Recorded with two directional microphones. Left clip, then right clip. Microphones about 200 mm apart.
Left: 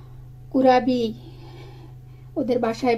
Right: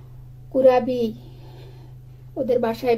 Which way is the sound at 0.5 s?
15° left (ahead or behind).